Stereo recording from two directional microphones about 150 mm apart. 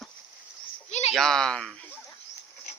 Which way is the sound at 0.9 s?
50° left (ahead or behind).